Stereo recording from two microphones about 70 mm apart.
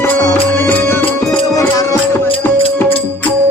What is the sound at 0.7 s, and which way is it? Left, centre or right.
Music, left.